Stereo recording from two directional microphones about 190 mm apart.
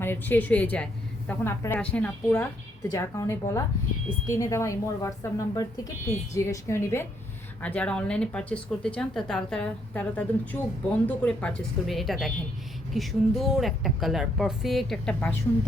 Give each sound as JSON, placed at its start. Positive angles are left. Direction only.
{"t": 0.0, "sound": "a woman's voice", "side_deg": 10}